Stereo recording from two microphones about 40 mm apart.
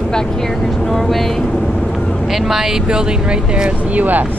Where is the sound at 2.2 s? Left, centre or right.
Centre; by 3.7 s right.